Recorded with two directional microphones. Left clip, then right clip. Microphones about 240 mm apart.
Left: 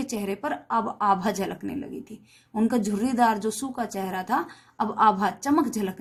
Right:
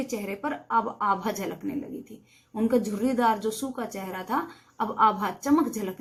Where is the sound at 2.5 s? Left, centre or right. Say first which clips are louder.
Even; left.